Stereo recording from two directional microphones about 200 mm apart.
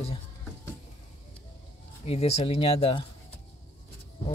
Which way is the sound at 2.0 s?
30° left (ahead or behind).